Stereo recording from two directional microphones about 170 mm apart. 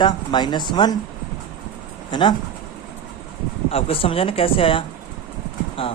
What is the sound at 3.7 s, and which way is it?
Speech, 35° left (ahead or behind).